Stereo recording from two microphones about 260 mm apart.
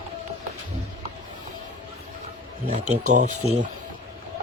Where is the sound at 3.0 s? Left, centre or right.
Right.